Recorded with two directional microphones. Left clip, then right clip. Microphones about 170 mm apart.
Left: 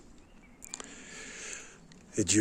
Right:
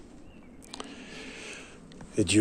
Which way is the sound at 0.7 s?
40° left (ahead or behind).